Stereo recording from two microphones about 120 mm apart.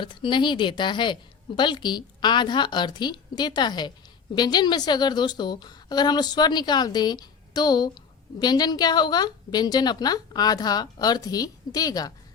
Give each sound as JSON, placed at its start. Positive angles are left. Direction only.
{"t": 0.0, "sound": "a woman's voice", "side_deg": 40}